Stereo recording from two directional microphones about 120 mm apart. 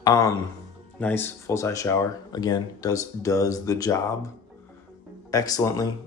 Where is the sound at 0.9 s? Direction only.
15° left (ahead or behind).